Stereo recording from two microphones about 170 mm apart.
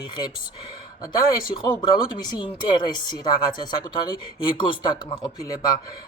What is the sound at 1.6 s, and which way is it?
Speech, 25° left (ahead or behind).